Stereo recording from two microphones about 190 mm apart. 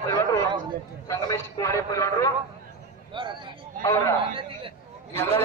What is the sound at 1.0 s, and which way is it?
A man's voice, 15° left (ahead or behind).